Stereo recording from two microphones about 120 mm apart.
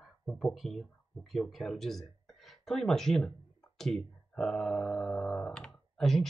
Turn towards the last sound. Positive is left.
turn(degrees=5)  # may be behind; listen again after turning